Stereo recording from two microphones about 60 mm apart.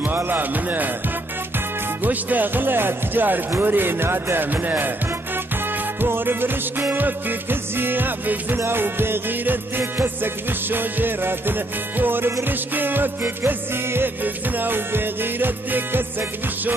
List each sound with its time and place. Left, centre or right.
0.0 s music: right
2.0 s music: right
5.9 s music: right